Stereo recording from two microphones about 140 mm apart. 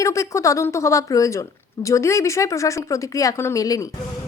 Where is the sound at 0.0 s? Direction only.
20° left (ahead or behind).